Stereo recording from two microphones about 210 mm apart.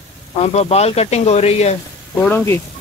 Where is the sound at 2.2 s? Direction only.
10° left (ahead or behind).